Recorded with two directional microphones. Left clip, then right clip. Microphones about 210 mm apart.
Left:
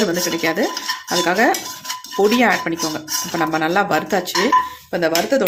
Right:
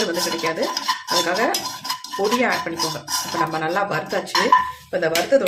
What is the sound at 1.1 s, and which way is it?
Speech, 45° left (ahead or behind).